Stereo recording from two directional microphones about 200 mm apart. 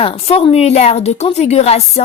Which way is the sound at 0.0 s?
30° left (ahead or behind).